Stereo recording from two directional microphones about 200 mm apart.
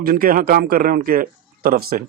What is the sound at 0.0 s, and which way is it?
A man's voice, 45° right (ahead or behind).